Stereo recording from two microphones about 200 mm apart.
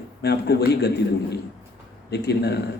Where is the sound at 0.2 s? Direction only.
55° left (ahead or behind).